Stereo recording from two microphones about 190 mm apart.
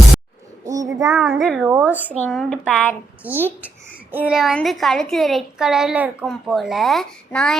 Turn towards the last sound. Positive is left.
turn(degrees=0)  # may be behind; listen again after turning